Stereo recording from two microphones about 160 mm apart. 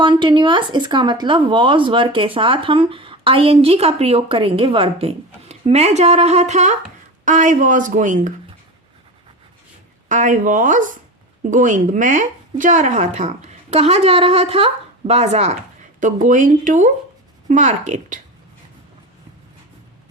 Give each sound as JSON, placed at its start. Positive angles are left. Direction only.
{"t": 0.0, "sound": "speech", "side_deg": -30}
{"t": 10.1, "sound": "speech", "side_deg": -50}
{"t": 16.0, "sound": "speech", "side_deg": -55}